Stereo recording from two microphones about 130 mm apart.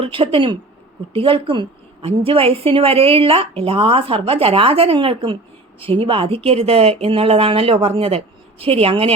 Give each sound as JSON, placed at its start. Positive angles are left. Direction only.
{"t": 0.0, "sound": "a woman's voice", "side_deg": -45}